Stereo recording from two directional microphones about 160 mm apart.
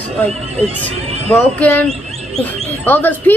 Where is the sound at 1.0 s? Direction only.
40° right (ahead or behind).